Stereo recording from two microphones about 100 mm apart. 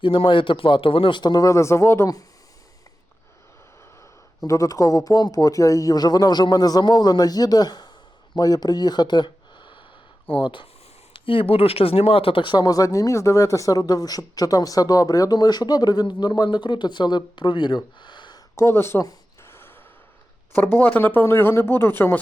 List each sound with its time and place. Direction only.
0.0 s speech: 55° left (ahead or behind); by 2.2 s 30° left (ahead or behind)
4.4 s speech: 35° left (ahead or behind); by 17.7 s 50° left (ahead or behind)
18.0 s a sound: 50° left (ahead or behind)
18.5 s speech: 25° left (ahead or behind)
19.4 s gasp: 25° left (ahead or behind)
20.7 s speech: 15° left (ahead or behind)